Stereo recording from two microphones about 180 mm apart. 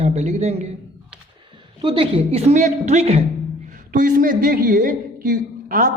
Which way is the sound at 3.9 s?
50° right (ahead or behind).